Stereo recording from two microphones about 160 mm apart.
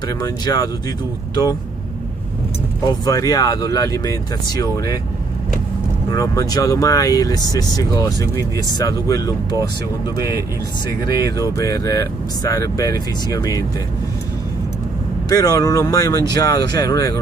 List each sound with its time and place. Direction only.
0.2 s speech: 25° left (ahead or behind)
3.1 s speech: 20° left (ahead or behind)
6.0 s speech: 20° left (ahead or behind)
10.9 s speech: 20° left (ahead or behind)
15.2 s speech: 25° left (ahead or behind)